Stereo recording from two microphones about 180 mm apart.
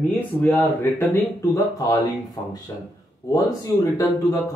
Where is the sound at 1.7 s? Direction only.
20° left (ahead or behind).